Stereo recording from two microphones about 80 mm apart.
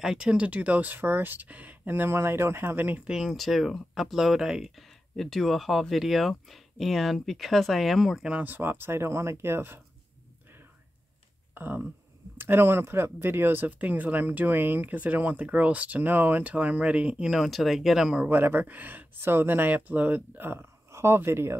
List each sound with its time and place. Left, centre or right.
0.0 s speech: centre; by 3.0 s right
3.1 s speech: centre
8.3 s speech: right
11.5 s speech: right; by 18.3 s centre
18.3 s speech: right